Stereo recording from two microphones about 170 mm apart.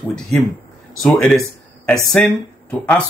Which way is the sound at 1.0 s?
5° left (ahead or behind).